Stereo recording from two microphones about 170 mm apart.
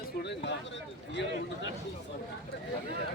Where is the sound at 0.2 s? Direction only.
90° left.